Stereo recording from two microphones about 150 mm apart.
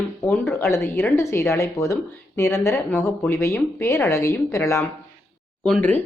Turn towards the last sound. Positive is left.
turn(degrees=10)  # may be behind; listen again after turning